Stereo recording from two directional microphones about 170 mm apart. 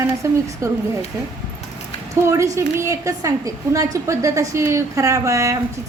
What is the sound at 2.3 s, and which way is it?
A woman's voice, 20° right (ahead or behind).